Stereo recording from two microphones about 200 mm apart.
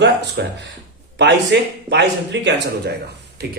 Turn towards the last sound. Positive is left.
turn(degrees=-55)  # may be behind; listen again after turning